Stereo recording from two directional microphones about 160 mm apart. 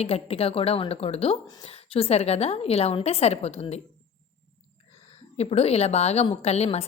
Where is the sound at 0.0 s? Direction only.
40° left (ahead or behind).